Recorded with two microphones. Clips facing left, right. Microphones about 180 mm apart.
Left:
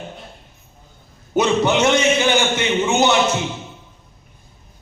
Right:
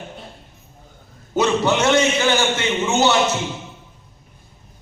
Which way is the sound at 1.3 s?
15° left (ahead or behind).